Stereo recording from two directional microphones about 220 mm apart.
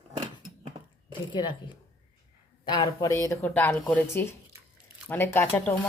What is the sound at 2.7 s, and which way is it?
Speech, 15° left (ahead or behind).